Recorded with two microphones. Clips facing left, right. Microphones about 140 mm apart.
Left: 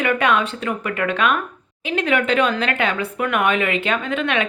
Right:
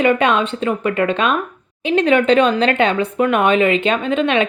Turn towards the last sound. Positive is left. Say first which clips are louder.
# right 5 dB
turn(degrees=-20)  # may be behind; listen again after turning